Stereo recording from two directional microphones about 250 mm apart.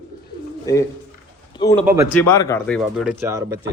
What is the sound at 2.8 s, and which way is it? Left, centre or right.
Speech, centre.